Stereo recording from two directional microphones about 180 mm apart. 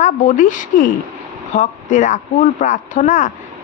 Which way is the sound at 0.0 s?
45° left (ahead or behind).